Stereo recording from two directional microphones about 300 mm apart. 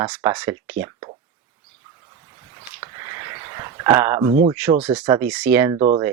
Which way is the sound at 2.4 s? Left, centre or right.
Centre.